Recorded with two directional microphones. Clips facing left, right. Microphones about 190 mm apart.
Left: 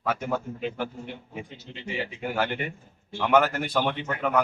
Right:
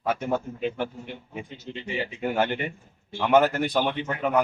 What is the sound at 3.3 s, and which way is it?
A man's voice, 20° right (ahead or behind).